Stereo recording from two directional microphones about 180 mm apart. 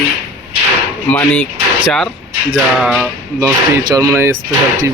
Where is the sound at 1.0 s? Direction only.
10° left (ahead or behind).